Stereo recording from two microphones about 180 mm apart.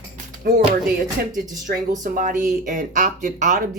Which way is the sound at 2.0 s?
45° right (ahead or behind).